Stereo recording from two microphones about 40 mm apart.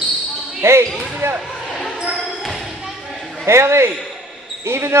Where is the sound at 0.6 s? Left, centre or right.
Right.